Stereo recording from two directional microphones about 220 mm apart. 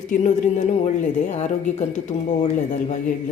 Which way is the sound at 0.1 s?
35° left (ahead or behind).